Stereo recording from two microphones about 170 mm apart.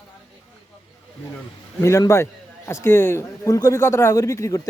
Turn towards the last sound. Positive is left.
turn(degrees=20)  # may be behind; listen again after turning